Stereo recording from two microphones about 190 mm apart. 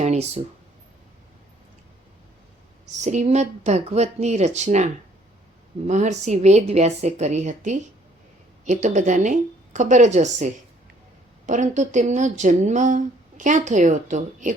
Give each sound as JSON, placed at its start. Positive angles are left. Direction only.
{"t": 0.0, "sound": "a sound", "side_deg": -35}
{"t": 3.0, "sound": "speech", "side_deg": -40}
{"t": 5.9, "sound": "speech", "side_deg": -40}